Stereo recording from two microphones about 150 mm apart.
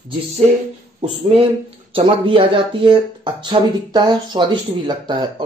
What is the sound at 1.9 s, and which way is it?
Speech, 35° right (ahead or behind).